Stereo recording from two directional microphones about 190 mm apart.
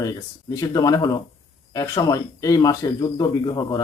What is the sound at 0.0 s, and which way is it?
Speech, 20° left (ahead or behind).